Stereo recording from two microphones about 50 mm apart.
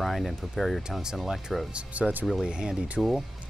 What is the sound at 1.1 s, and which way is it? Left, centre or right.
Speech, centre.